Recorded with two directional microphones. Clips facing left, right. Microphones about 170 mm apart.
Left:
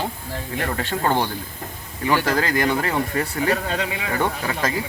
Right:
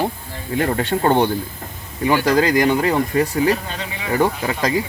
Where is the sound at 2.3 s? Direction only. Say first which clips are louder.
Right 5 dB; 20° right (ahead or behind).